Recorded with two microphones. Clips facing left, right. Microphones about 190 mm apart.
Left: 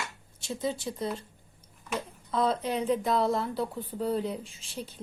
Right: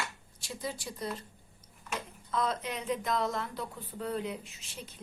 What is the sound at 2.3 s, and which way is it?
Speech, 30° left (ahead or behind).